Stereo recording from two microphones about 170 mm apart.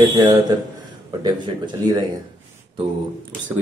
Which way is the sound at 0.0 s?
25° right (ahead or behind).